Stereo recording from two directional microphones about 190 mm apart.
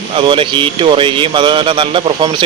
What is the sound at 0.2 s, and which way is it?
Speech, 25° right (ahead or behind).